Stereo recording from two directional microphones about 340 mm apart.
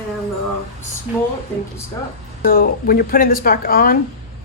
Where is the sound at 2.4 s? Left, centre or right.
Left.